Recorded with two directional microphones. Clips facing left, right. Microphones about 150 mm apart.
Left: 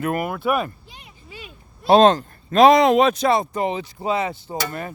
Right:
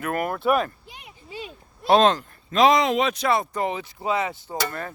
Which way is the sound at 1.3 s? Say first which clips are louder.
Right 5 dB; 30° right (ahead or behind).